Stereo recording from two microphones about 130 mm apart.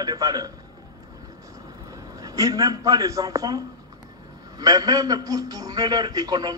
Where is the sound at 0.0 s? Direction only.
30° right (ahead or behind).